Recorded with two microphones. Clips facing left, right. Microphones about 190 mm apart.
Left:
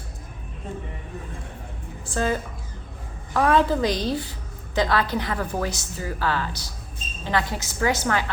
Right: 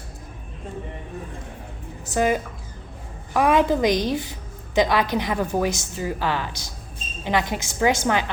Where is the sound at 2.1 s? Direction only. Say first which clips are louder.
Right 4 dB; 15° right (ahead or behind).